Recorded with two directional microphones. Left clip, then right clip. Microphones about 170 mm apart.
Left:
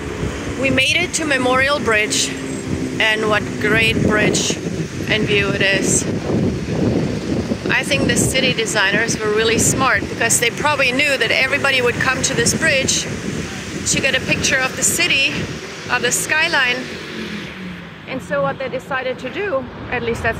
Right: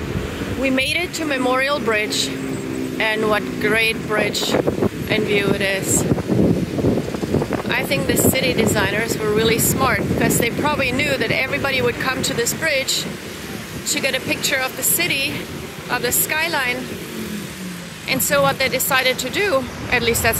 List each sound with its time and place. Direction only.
0.7 s speech: 10° right (ahead or behind)
7.7 s speech: 10° right (ahead or behind)
13.9 s speech: 10° right (ahead or behind)
18.1 s speech: 20° right (ahead or behind)